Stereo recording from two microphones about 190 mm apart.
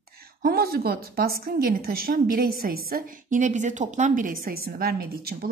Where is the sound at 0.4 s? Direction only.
50° right (ahead or behind).